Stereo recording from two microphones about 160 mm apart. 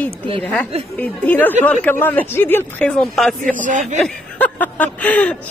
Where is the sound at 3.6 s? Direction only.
55° right (ahead or behind).